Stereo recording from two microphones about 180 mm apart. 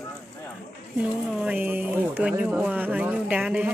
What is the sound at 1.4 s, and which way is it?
Speech, 10° right (ahead or behind).